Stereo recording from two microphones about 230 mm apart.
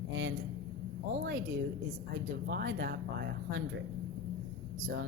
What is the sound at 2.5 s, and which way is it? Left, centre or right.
Speech, right.